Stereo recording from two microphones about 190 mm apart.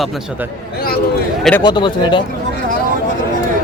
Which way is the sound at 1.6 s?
25° left (ahead or behind).